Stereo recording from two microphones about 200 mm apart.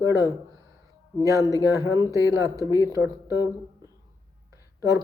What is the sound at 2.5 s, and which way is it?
Speech, 15° left (ahead or behind).